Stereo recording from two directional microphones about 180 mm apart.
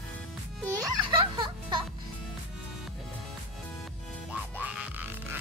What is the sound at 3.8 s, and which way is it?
Music, centre (ahead or behind).